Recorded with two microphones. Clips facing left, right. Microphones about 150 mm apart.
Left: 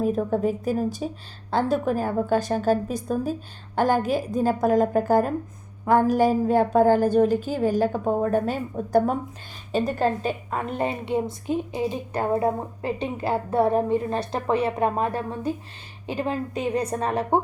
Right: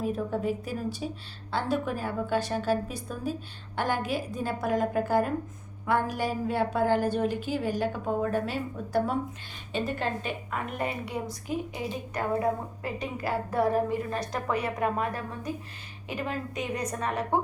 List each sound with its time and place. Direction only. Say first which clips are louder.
0.0 s a woman's voice: left 6 dB; 45° left (ahead or behind)